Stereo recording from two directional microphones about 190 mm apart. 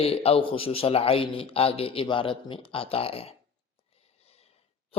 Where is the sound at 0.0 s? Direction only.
30° left (ahead or behind).